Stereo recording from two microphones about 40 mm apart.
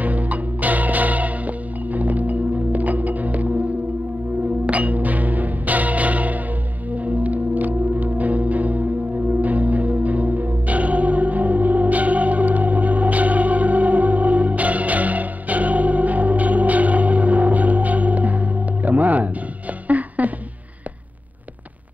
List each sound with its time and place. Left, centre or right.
0.0 s music: right
4.6 s music: right
19.9 s a sound: right